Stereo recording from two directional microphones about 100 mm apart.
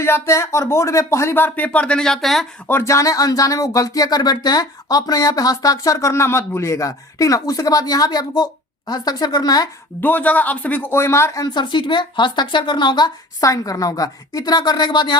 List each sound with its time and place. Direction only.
0.0 s speech: 25° left (ahead or behind); by 2.5 s 5° left (ahead or behind)
2.6 s speech: 25° left (ahead or behind)
10.0 s speech: 15° left (ahead or behind)
11.5 s speech: 50° left (ahead or behind)
13.4 s speech: 35° left (ahead or behind)